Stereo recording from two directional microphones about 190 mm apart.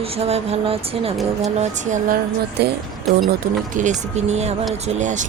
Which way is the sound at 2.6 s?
55° right (ahead or behind).